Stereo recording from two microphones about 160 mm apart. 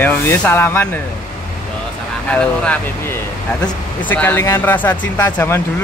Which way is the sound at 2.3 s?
5° left (ahead or behind).